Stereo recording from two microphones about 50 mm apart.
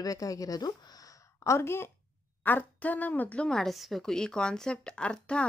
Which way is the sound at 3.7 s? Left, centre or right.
Centre.